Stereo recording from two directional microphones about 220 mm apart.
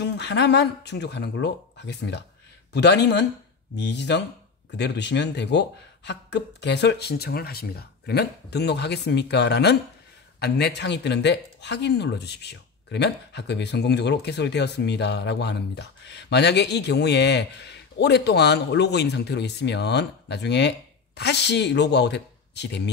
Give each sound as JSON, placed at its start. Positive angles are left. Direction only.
{"t": 0.0, "sound": "speech", "side_deg": 50}